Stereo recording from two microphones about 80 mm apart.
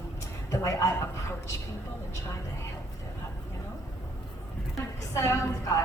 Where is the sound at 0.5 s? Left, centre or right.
Left.